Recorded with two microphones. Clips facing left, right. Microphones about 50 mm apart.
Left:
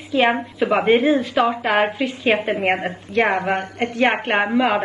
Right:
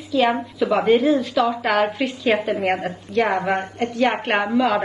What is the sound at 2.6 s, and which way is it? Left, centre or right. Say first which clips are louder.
A woman's voice: left 1 dB; left.